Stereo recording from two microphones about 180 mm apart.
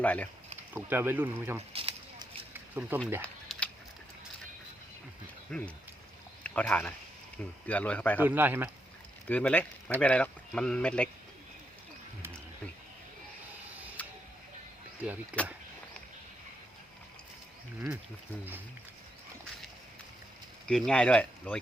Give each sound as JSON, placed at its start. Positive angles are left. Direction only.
{"t": 0.0, "sound": "speech", "side_deg": 10}
{"t": 0.7, "sound": "speech", "side_deg": -10}
{"t": 1.7, "sound": "a sound", "side_deg": -30}
{"t": 2.5, "sound": "a sound", "side_deg": -10}
{"t": 3.2, "sound": "a sound", "side_deg": 5}
{"t": 5.5, "sound": "speech", "side_deg": 5}
{"t": 8.2, "sound": "speech", "side_deg": -10}
{"t": 9.2, "sound": "speech", "side_deg": 10}
{"t": 15.3, "sound": "speech", "side_deg": -5}
{"t": 20.7, "sound": "speech", "side_deg": 5}